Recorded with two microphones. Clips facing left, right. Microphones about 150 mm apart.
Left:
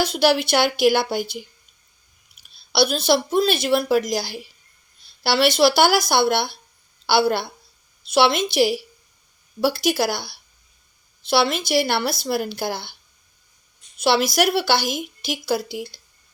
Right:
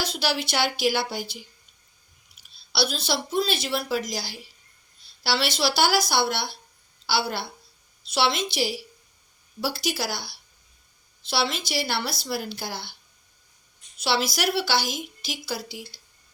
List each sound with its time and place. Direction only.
0.0 s a woman's voice: 55° left (ahead or behind)
2.7 s a woman's voice: 55° left (ahead or behind)
14.0 s a woman's voice: 55° left (ahead or behind)